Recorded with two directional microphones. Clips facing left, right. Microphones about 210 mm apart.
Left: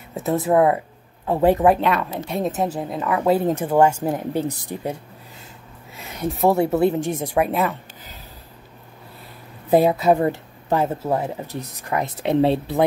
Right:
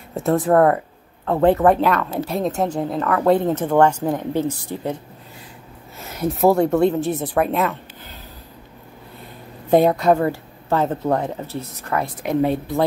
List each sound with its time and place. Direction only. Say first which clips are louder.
0.1 s a woman's voice: right 2 dB; centre (ahead or behind)
5.9 s a woman's voice: right 3 dB; centre (ahead or behind)
9.7 s a woman's voice: right 1 dB; 5° left (ahead or behind)
10.1 s speech: even; 20° left (ahead or behind)
10.8 s a woman's voice: right 3 dB; 10° left (ahead or behind); by 12.7 s 30° left (ahead or behind)